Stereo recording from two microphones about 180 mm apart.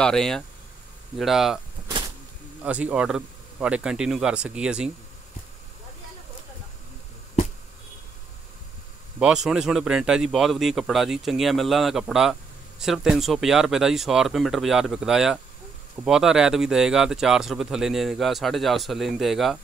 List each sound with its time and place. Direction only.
0.0 s a man's voice: 5° left (ahead or behind)
2.6 s a man's voice: 5° right (ahead or behind)
9.2 s a man's voice: 5° right (ahead or behind)